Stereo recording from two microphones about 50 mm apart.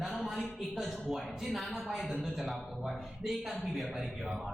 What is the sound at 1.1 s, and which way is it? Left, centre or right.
Speech, centre.